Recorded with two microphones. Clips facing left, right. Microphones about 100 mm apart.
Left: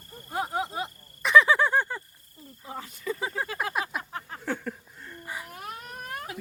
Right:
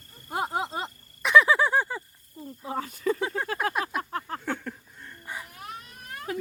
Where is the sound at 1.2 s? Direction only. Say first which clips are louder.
Even; centre (ahead or behind).